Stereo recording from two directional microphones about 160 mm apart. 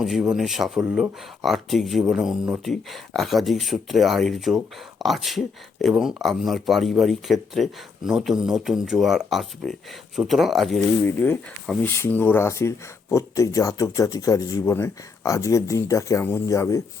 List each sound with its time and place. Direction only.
0.0 s speech: centre (ahead or behind)
11.8 s speech: 10° left (ahead or behind)